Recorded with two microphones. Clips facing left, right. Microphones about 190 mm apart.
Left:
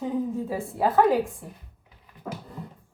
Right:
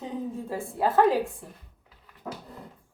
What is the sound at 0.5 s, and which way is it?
Speech, centre (ahead or behind).